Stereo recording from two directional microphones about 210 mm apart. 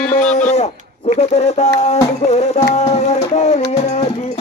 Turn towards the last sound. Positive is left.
turn(degrees=30)  # may be behind; listen again after turning